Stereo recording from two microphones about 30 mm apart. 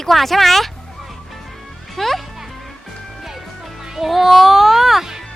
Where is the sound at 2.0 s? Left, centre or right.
Centre.